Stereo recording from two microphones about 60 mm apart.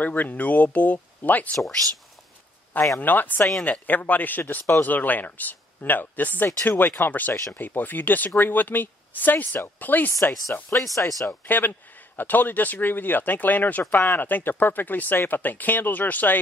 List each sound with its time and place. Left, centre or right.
0.0 s speech: left
1.8 s speech: right
3.0 s speech: left
11.0 s speech: left
11.2 s speech: left